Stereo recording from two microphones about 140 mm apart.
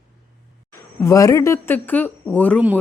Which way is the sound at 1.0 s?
25° left (ahead or behind).